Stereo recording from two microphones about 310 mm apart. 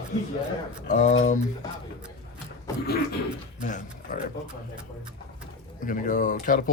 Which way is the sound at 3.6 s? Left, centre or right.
Left.